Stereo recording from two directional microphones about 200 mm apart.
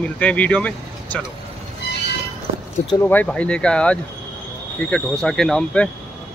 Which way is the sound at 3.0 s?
10° left (ahead or behind).